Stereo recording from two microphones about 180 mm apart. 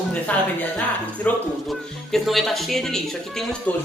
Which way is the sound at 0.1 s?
10° left (ahead or behind).